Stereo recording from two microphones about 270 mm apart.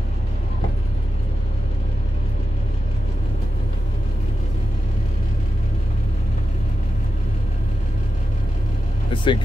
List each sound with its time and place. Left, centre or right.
9.1 s vehicle: centre